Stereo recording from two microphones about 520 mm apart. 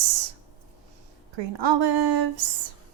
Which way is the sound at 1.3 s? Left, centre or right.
Right.